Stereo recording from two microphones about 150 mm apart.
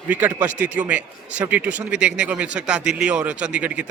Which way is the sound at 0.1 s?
10° right (ahead or behind).